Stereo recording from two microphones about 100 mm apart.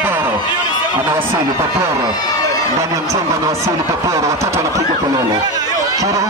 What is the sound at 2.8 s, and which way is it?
Speech, 30° right (ahead or behind).